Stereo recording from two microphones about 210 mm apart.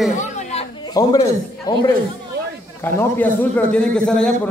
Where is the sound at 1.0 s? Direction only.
15° left (ahead or behind).